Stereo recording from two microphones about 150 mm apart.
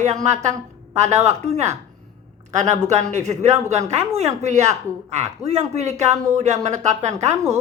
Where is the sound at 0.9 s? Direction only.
45° right (ahead or behind).